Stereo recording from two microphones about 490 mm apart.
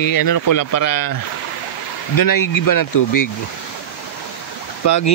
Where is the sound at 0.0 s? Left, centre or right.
Left.